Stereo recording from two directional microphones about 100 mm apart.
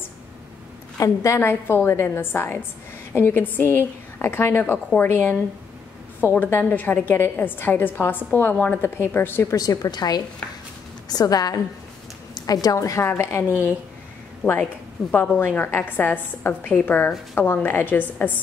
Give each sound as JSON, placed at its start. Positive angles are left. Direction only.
{"t": 0.9, "sound": "a woman's voice", "side_deg": 30}
{"t": 9.6, "sound": "a woman's voice", "side_deg": 40}
{"t": 14.6, "sound": "a woman's voice", "side_deg": 10}